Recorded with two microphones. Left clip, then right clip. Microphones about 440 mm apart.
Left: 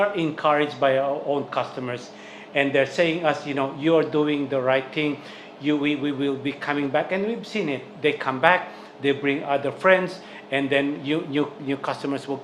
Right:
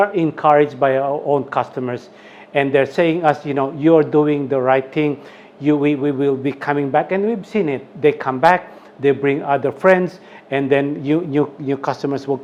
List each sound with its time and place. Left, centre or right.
0.0 s a man's voice: right
5.6 s a man's voice: right
10.5 s a man's voice: right